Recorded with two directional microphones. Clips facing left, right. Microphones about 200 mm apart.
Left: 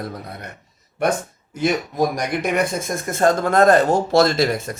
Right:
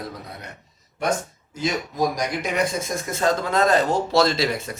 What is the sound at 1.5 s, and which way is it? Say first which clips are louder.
Speech: left 5 dB; 60° left (ahead or behind).